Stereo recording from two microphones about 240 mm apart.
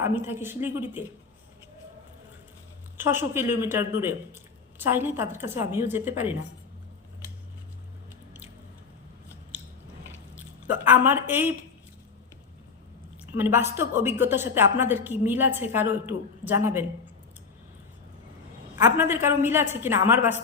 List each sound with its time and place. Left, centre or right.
0.3 s a woman's voice: centre
3.0 s a woman's voice: centre
10.3 s speech: centre
13.2 s a woman's voice: centre
18.8 s a woman's voice: centre